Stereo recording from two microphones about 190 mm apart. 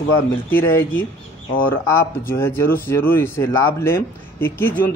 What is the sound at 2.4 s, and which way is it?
Speech, 10° left (ahead or behind).